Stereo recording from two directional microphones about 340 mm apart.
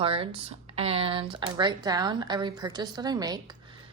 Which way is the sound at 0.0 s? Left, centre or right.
Centre.